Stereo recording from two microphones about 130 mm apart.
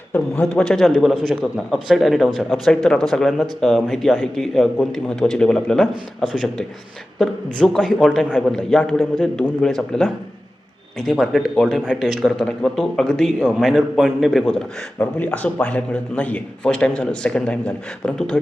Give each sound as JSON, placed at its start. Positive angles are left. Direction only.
{"t": 0.1, "sound": "a man's voice", "side_deg": 5}
{"t": 14.9, "sound": "a man's voice", "side_deg": 10}